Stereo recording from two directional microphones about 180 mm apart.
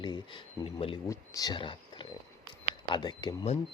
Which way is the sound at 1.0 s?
20° left (ahead or behind).